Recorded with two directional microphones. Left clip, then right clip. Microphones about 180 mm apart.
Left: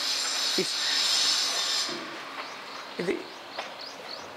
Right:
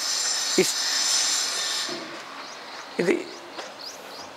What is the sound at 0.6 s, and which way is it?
Speech, 55° right (ahead or behind).